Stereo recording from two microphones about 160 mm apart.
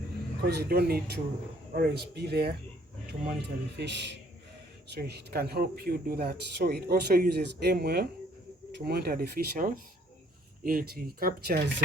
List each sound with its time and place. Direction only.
0.4 s a man's voice: 80° right